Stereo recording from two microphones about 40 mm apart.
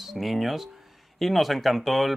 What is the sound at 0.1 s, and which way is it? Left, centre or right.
Speech, centre.